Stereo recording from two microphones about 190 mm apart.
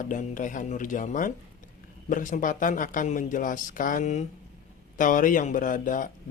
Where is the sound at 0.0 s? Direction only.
45° left (ahead or behind).